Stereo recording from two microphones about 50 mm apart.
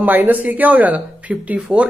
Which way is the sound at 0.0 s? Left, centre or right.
Right.